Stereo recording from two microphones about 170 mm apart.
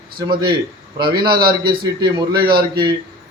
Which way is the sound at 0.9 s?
25° right (ahead or behind).